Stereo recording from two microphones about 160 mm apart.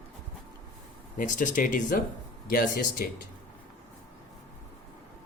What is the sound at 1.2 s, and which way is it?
Speech, 55° left (ahead or behind).